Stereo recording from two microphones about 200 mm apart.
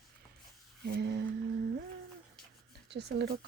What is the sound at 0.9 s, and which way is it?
Speech, 55° right (ahead or behind).